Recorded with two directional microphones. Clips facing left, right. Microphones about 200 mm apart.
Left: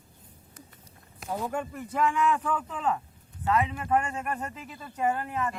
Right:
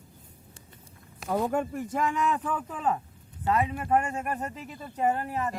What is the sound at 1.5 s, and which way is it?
Speech, 45° right (ahead or behind).